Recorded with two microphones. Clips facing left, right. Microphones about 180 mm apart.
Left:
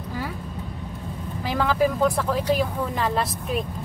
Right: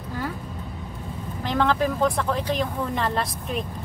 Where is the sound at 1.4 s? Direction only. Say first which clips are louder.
Left 1 dB; 5° left (ahead or behind).